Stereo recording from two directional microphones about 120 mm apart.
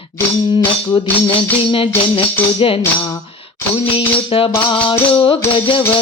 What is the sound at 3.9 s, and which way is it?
Music, 50° left (ahead or behind).